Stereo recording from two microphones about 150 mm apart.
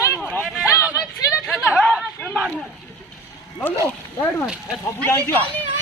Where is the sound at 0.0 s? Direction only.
20° left (ahead or behind).